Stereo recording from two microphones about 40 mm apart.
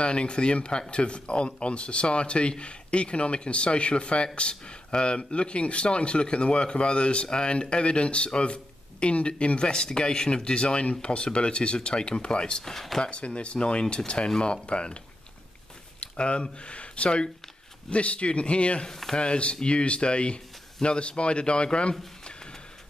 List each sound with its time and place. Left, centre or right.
0.0 s speech: left
12.6 s speech: centre
13.0 s speech: left
16.0 s speech: left
18.9 s speech: centre
19.1 s speech: left
22.2 s a sound: centre